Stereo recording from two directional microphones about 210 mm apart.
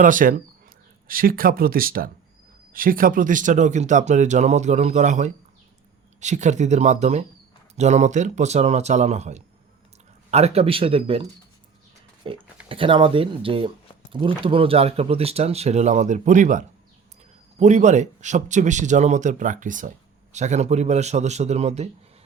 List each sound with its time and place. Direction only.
0.0 s speech: 40° right (ahead or behind)
12.2 s speech: 25° right (ahead or behind)